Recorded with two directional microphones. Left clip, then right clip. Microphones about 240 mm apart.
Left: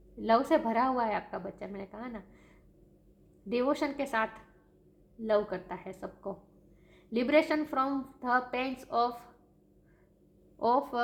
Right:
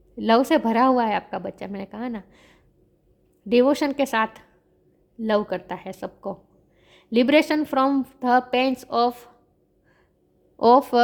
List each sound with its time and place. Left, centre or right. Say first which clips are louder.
0.2 s a woman's voice: right 7 dB; right
10.6 s a woman's voice: right 12 dB; right